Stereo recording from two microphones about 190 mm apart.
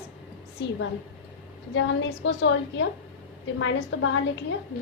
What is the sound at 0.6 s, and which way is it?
A woman's voice, 65° left (ahead or behind).